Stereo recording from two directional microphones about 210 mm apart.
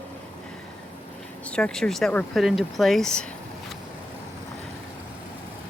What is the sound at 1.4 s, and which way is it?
Speech, 5° left (ahead or behind).